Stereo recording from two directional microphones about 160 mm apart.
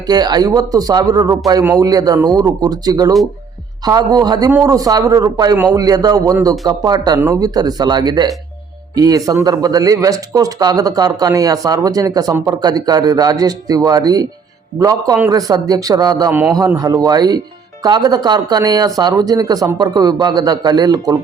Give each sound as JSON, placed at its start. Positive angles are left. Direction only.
{"t": 0.1, "sound": "speech", "side_deg": -25}